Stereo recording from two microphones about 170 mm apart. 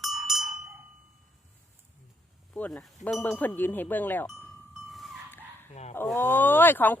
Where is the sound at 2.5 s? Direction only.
5° left (ahead or behind).